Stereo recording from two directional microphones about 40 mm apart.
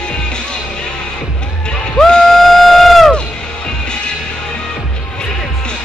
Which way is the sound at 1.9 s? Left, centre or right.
Centre.